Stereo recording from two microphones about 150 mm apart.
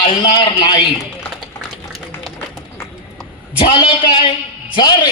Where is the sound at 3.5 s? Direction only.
35° left (ahead or behind).